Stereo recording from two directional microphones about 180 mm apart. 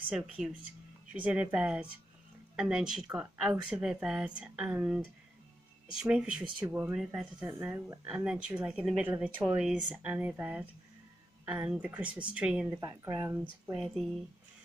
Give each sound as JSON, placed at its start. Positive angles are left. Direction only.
{"t": 0.1, "sound": "speech", "side_deg": -5}
{"t": 12.7, "sound": "speech", "side_deg": -15}
{"t": 13.7, "sound": "speech", "side_deg": 0}